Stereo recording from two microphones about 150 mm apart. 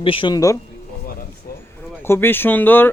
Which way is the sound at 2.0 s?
15° left (ahead or behind).